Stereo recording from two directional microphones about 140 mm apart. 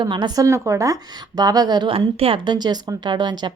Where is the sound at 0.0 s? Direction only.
35° right (ahead or behind).